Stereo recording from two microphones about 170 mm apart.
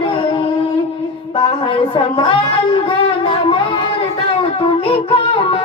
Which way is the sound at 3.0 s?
30° left (ahead or behind).